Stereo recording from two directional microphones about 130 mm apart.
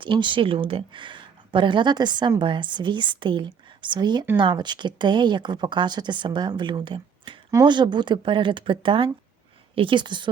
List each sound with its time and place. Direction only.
0.0 s speech: 40° right (ahead or behind)